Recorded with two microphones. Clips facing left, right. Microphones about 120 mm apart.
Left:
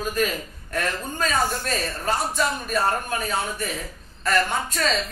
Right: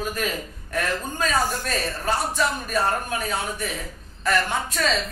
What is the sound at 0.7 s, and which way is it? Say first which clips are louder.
A man's voice: right 1 dB; 5° right (ahead or behind).